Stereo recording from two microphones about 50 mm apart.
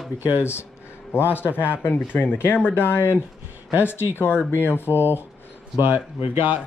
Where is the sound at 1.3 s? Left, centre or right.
Left.